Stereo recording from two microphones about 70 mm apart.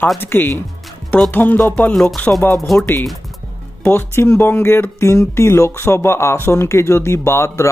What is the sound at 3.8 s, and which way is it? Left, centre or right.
Speech, left.